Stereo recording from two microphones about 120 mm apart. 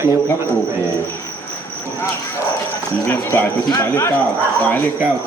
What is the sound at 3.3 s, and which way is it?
Speech, 20° left (ahead or behind).